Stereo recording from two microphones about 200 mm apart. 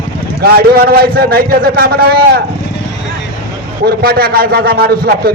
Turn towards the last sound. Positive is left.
turn(degrees=-50)  # may be behind; listen again after turning